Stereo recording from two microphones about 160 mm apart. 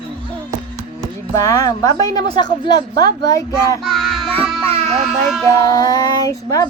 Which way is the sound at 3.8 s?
Centre (ahead or behind).